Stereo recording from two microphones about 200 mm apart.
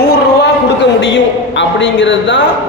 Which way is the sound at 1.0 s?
65° left (ahead or behind).